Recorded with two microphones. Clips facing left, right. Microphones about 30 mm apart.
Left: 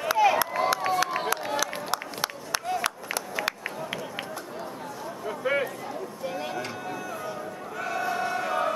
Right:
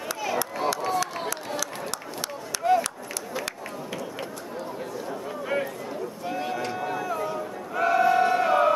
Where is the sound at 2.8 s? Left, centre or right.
Centre.